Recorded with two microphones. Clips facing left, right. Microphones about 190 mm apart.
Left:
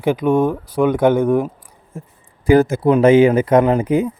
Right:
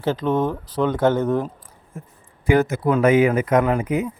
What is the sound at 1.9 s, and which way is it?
Speech, 25° left (ahead or behind).